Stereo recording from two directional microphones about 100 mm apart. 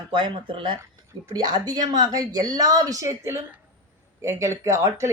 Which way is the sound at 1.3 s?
45° right (ahead or behind).